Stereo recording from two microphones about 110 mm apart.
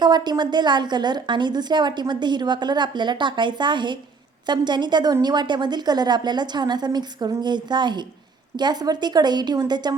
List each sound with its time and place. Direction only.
0.0 s a woman's voice: 40° right (ahead or behind)